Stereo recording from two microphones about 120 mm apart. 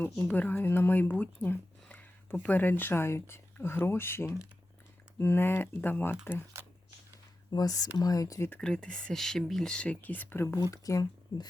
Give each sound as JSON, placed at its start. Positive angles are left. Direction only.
{"t": 0.0, "sound": "speech", "side_deg": 15}
{"t": 6.5, "sound": "a sound", "side_deg": -25}
{"t": 7.5, "sound": "speech", "side_deg": 30}
{"t": 8.4, "sound": "speech", "side_deg": 10}